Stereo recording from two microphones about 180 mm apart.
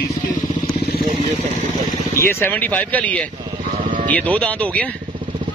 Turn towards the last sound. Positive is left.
turn(degrees=5)  # may be behind; listen again after turning